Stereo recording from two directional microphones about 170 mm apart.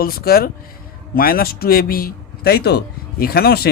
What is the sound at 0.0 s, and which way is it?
A man's voice, 60° left (ahead or behind).